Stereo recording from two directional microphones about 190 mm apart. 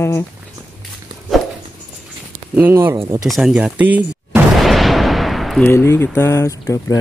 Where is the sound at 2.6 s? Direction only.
10° right (ahead or behind).